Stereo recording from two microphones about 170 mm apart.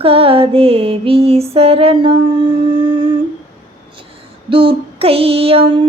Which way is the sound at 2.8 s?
30° right (ahead or behind).